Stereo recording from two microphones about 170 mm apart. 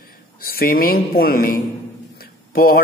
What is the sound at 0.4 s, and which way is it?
A man's voice, 60° left (ahead or behind).